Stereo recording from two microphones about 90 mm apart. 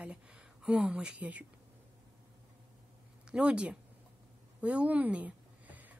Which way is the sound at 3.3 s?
10° right (ahead or behind).